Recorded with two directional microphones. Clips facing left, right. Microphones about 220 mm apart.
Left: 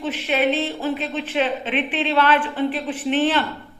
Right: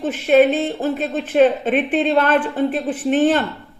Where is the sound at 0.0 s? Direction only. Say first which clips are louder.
Right 8 dB; 45° right (ahead or behind).